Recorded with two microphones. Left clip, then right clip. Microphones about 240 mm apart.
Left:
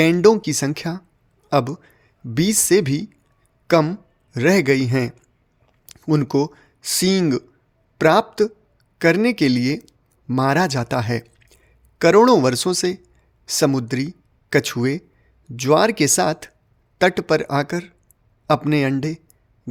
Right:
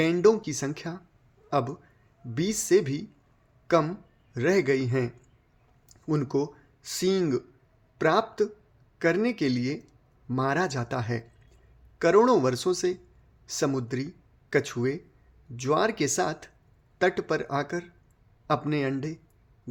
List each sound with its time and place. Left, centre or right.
0.0 s a man's voice: left